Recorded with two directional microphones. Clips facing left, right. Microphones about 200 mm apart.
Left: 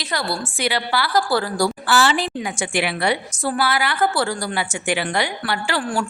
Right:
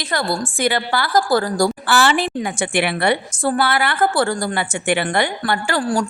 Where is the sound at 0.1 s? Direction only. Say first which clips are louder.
Right 4 dB; 50° right (ahead or behind).